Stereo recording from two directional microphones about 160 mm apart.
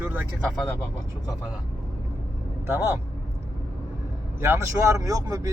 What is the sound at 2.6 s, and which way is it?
Speech, 15° right (ahead or behind).